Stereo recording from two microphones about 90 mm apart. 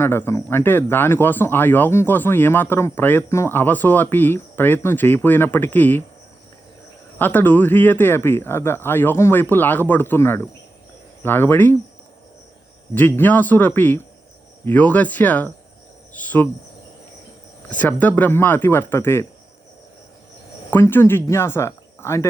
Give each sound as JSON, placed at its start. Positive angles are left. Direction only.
{"t": 0.0, "sound": "speech", "side_deg": 25}
{"t": 7.2, "sound": "speech", "side_deg": 20}
{"t": 12.9, "sound": "speech", "side_deg": 20}
{"t": 16.1, "sound": "cricket", "side_deg": 20}
{"t": 17.7, "sound": "speech", "side_deg": 20}
{"t": 20.7, "sound": "speech", "side_deg": 25}